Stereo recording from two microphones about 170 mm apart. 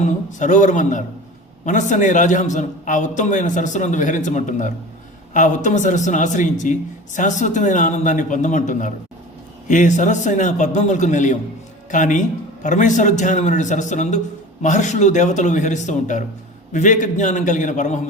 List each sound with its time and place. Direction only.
0.0 s a man's voice: 45° left (ahead or behind)